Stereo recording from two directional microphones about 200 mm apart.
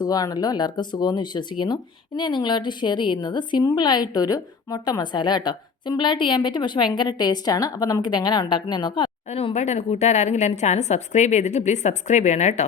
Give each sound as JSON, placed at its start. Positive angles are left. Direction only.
{"t": 0.0, "sound": "speech", "side_deg": 20}